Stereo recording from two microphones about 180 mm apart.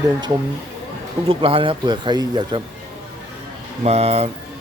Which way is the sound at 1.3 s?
30° right (ahead or behind).